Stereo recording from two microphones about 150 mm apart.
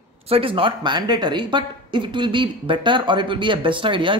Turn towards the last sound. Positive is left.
turn(degrees=-35)  # may be behind; listen again after turning